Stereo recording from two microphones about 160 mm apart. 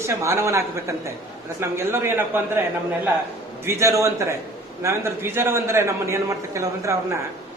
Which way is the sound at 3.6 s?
20° right (ahead or behind).